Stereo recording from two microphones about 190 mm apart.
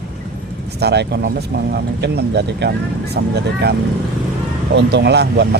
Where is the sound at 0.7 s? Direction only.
60° right (ahead or behind).